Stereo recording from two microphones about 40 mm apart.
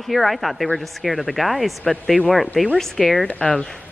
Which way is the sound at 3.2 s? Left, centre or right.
Left.